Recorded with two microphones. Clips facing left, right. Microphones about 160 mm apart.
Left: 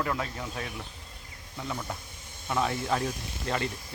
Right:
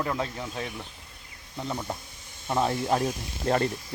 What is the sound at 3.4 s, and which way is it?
Speech, 40° right (ahead or behind).